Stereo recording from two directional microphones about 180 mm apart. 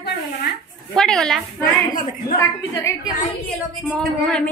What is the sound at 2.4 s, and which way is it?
Speech, 15° left (ahead or behind).